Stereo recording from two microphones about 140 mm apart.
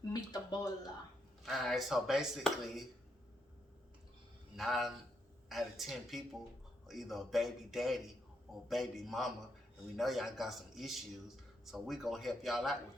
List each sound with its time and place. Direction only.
0.1 s a sound: 25° left (ahead or behind)
1.5 s speech: centre (ahead or behind)
4.5 s speech: centre (ahead or behind)